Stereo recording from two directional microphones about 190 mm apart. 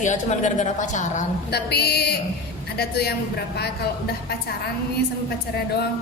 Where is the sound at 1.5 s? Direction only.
60° left (ahead or behind).